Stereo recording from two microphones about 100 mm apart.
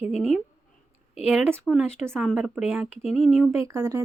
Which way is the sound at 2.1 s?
10° right (ahead or behind).